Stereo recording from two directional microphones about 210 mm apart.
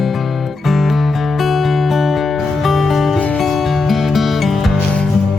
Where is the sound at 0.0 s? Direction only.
Centre (ahead or behind).